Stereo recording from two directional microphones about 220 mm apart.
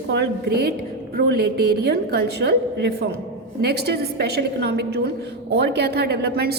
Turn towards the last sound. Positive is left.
turn(degrees=-45)  # may be behind; listen again after turning